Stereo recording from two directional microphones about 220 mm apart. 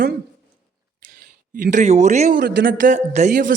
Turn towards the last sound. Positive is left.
turn(degrees=-35)  # may be behind; listen again after turning